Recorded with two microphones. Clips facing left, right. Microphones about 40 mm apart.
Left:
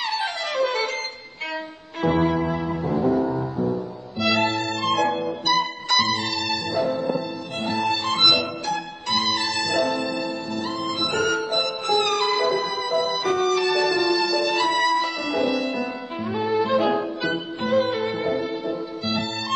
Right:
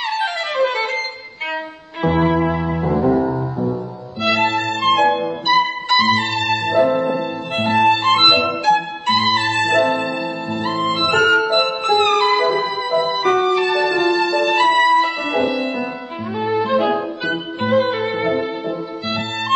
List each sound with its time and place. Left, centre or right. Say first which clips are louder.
0.1 s flute: right 5 dB; right
2.0 s music: right 4 dB; centre
4.2 s music: right 4 dB; right
13.5 s music: right 4 dB; right
15.4 s music: right 3 dB; centre
16.3 s music: right 3 dB; centre
17.6 s music: right 5 dB; right